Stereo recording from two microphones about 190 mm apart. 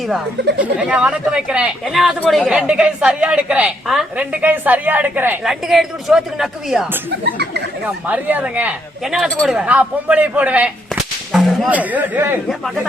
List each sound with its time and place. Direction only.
0.6 s speech: 5° right (ahead or behind)
7.3 s chatter: 60° right (ahead or behind)
8.0 s speech: 10° right (ahead or behind)
12.5 s speech: centre (ahead or behind)